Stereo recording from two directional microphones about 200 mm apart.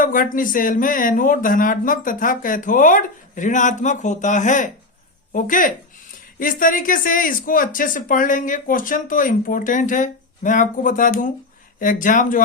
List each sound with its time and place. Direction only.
0.0 s speech: 45° left (ahead or behind)